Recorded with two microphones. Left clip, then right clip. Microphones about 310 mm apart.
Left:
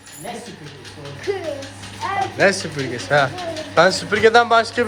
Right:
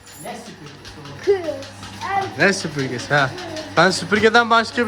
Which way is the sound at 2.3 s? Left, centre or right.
Centre.